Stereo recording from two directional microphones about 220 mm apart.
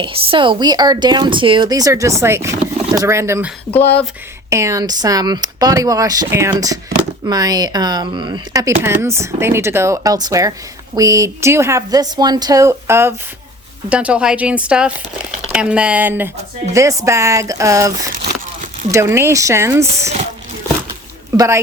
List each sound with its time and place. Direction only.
0.0 s speech: 25° right (ahead or behind)
3.7 s speech: 10° left (ahead or behind)
4.4 s speech: 15° right (ahead or behind)
19.9 s speech: 30° right (ahead or behind)
21.3 s speech: 15° right (ahead or behind)